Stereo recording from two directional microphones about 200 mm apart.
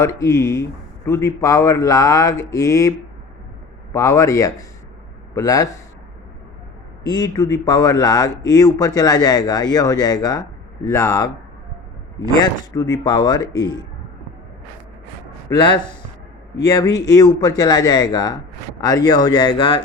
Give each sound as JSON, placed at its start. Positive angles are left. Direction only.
{"t": 0.0, "sound": "speech", "side_deg": 15}
{"t": 3.9, "sound": "a man's voice", "side_deg": 15}
{"t": 7.0, "sound": "a man's voice", "side_deg": 20}
{"t": 12.4, "sound": "a man's voice", "side_deg": 15}
{"t": 15.4, "sound": "a man's voice", "side_deg": 25}